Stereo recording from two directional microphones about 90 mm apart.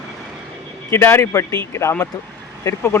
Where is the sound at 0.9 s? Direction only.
25° left (ahead or behind).